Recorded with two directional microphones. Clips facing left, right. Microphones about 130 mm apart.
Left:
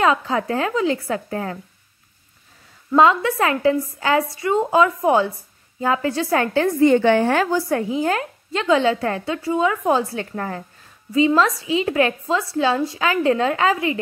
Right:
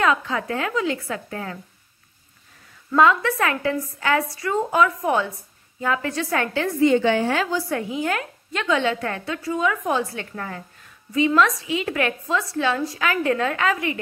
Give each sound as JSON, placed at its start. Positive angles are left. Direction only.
{"t": 0.0, "sound": "a woman's voice", "side_deg": 30}
{"t": 2.9, "sound": "a woman's voice", "side_deg": 25}